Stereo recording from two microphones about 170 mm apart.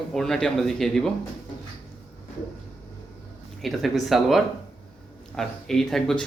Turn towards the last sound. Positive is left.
turn(degrees=0)  # may be behind; listen again after turning